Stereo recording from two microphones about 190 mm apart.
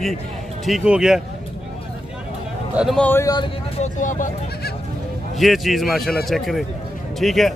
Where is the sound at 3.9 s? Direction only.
40° left (ahead or behind).